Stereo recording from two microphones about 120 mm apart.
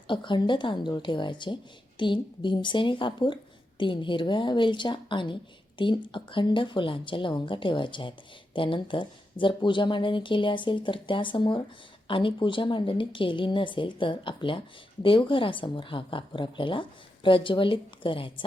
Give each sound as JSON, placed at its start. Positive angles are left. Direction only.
{"t": 0.1, "sound": "a woman's voice", "side_deg": 40}